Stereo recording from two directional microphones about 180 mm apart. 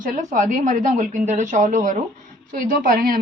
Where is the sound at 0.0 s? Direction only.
45° right (ahead or behind).